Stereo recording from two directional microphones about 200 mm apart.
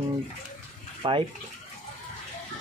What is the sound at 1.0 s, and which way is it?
Speech, 25° right (ahead or behind).